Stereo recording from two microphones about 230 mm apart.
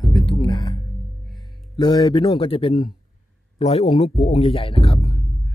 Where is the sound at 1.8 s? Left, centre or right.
Centre.